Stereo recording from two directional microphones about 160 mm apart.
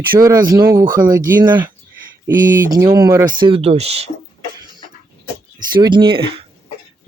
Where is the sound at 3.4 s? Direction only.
40° right (ahead or behind).